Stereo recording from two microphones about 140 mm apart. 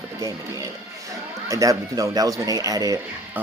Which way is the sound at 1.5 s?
25° right (ahead or behind).